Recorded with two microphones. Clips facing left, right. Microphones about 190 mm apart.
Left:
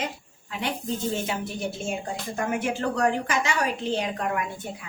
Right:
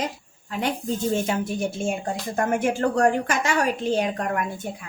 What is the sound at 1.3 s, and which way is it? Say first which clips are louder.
A woman's voice: right 5 dB; 45° right (ahead or behind).